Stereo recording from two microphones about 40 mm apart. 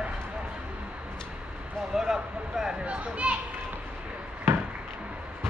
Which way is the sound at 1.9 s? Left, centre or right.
Centre.